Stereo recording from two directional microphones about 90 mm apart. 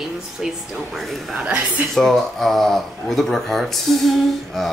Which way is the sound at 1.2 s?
15° right (ahead or behind).